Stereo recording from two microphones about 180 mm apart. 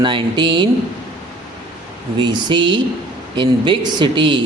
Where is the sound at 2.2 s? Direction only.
25° right (ahead or behind).